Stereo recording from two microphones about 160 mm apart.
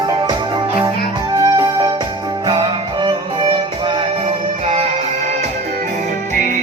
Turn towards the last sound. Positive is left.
turn(degrees=-40)  # may be behind; listen again after turning